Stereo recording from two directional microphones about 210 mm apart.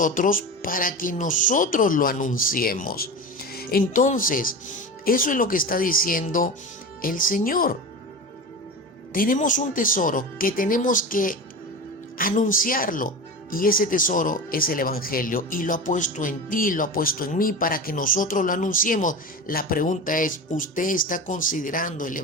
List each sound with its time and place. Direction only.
0.0 s speech: 40° left (ahead or behind)
9.1 s speech: 40° left (ahead or behind)